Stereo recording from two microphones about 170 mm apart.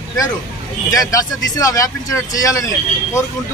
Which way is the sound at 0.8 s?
20° left (ahead or behind).